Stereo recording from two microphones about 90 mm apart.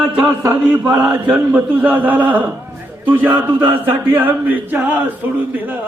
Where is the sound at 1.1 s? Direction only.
15° right (ahead or behind).